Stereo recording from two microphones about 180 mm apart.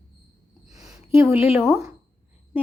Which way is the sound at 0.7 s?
20° right (ahead or behind).